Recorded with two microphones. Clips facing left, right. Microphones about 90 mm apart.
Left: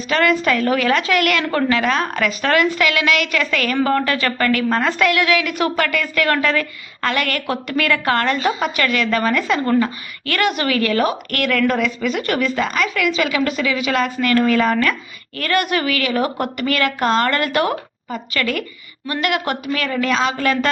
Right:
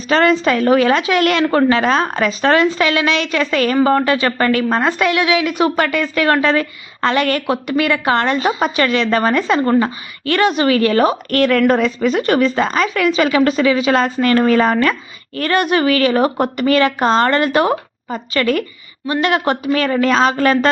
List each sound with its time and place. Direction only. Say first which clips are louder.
0.1 s a woman's voice: right 4 dB; 30° right (ahead or behind)